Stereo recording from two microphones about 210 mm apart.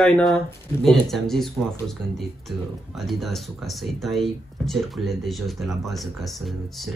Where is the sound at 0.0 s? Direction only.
Centre (ahead or behind).